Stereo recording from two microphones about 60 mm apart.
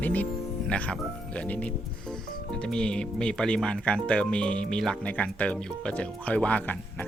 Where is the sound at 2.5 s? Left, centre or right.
Centre.